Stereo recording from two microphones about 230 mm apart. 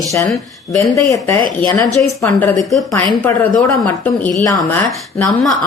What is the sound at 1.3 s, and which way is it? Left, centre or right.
A woman's voice, centre.